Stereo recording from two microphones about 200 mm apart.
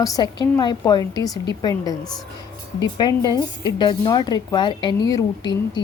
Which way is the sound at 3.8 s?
20° left (ahead or behind).